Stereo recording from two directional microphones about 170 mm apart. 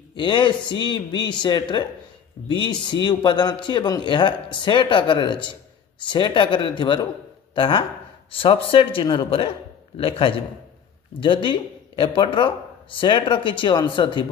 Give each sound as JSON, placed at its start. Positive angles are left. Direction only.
{"t": 0.1, "sound": "speech", "side_deg": 30}